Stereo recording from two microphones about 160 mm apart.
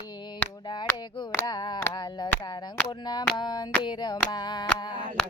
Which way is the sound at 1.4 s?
25° left (ahead or behind).